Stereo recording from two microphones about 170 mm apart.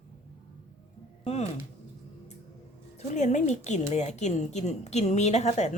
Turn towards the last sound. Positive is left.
turn(degrees=40)  # may be behind; listen again after turning